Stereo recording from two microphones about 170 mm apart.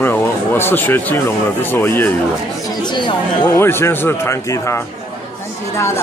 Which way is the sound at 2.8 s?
25° left (ahead or behind).